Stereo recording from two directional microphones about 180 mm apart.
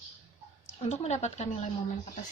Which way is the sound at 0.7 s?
40° left (ahead or behind).